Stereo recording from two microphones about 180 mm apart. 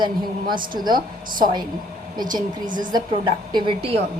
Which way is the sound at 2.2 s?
50° right (ahead or behind).